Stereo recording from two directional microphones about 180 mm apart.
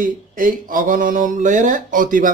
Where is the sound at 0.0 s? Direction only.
50° right (ahead or behind).